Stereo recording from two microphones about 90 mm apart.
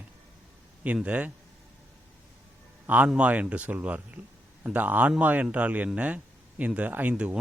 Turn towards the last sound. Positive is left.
turn(degrees=-15)  # may be behind; listen again after turning